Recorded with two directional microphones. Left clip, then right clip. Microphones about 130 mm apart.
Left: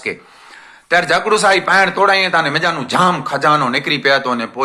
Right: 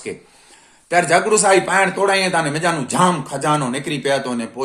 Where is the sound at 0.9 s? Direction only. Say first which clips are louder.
Left 2 dB; 20° right (ahead or behind).